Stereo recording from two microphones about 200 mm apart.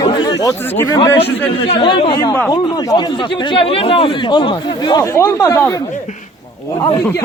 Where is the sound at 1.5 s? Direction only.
25° left (ahead or behind).